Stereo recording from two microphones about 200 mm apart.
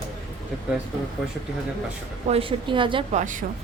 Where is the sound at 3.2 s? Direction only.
40° right (ahead or behind).